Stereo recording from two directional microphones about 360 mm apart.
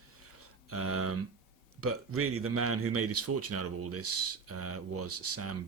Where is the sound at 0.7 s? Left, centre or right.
Right.